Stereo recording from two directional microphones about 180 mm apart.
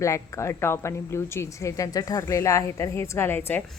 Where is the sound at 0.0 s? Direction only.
15° left (ahead or behind).